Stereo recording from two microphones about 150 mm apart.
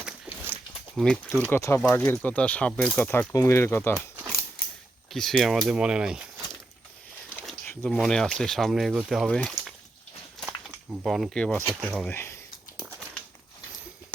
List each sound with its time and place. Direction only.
0.0 s a sound: 10° right (ahead or behind)
0.9 s speech: 5° left (ahead or behind)
1.8 s speech: 5° left (ahead or behind)
5.1 s speech: centre (ahead or behind)
7.8 s speech: centre (ahead or behind)
11.0 s speech: centre (ahead or behind)
11.7 s speech: 10° right (ahead or behind)
12.1 s speech: 15° left (ahead or behind)